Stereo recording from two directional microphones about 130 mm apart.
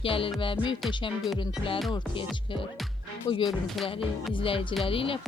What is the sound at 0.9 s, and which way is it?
Speech, 35° left (ahead or behind).